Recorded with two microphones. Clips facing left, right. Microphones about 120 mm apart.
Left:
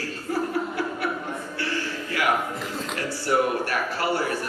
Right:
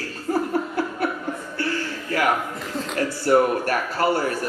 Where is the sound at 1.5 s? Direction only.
45° right (ahead or behind).